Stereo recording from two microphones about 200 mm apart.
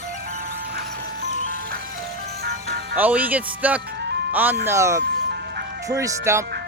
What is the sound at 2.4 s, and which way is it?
Music, 55° right (ahead or behind).